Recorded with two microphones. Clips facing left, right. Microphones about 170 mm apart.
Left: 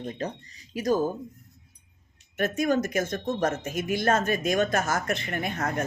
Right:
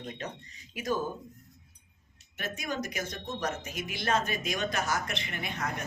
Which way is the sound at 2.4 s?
50° left (ahead or behind).